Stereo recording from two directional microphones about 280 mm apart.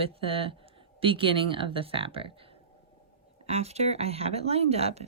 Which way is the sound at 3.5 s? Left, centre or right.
Right.